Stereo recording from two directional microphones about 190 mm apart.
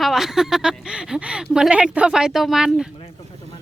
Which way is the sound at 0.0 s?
Centre (ahead or behind).